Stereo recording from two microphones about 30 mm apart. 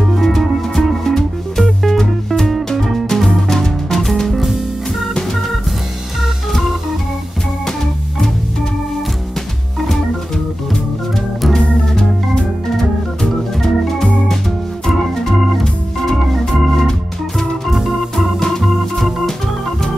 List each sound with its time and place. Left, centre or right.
0.1 s music: centre
12.4 s organ: centre
15.6 s organ: centre